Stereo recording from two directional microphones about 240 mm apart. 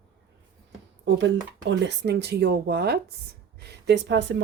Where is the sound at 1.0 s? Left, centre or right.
Right.